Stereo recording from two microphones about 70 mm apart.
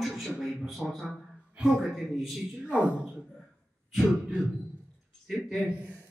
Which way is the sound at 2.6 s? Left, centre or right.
Centre.